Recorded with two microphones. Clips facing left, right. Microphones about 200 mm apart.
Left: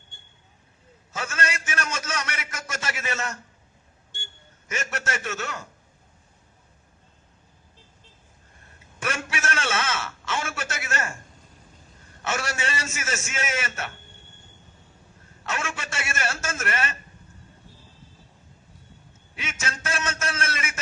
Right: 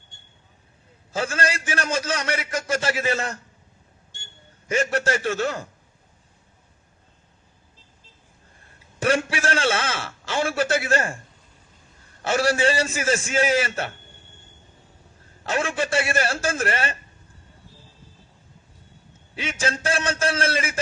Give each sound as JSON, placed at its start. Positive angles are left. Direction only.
{"t": 1.1, "sound": "a man's voice", "side_deg": -30}
{"t": 4.7, "sound": "a man's voice", "side_deg": -30}
{"t": 9.0, "sound": "a man's voice", "side_deg": -30}
{"t": 12.2, "sound": "a man's voice", "side_deg": -35}
{"t": 15.4, "sound": "a man's voice", "side_deg": -35}
{"t": 19.4, "sound": "a man's voice", "side_deg": -30}